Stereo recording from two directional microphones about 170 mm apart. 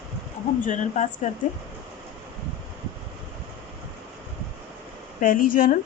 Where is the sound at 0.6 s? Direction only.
45° left (ahead or behind).